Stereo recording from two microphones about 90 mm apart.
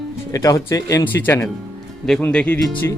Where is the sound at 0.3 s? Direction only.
35° left (ahead or behind).